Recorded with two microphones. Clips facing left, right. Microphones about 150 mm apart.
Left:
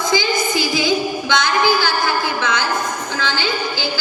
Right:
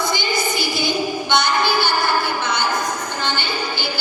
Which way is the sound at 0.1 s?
90° left.